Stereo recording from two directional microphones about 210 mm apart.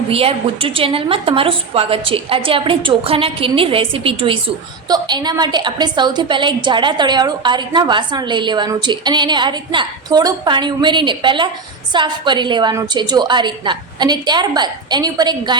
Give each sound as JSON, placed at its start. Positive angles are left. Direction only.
{"t": 0.1, "sound": "a woman's voice", "side_deg": -25}